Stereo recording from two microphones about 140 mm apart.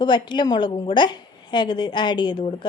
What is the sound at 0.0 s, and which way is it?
A woman's voice, 35° left (ahead or behind).